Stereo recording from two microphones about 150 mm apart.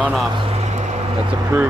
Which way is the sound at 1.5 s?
20° right (ahead or behind).